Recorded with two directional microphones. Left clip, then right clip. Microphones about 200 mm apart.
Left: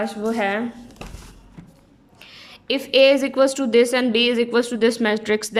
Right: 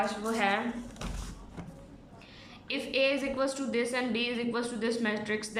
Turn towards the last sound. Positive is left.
turn(degrees=55)  # may be behind; listen again after turning